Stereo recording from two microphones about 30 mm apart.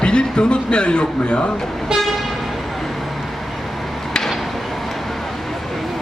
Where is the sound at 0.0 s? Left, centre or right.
Left.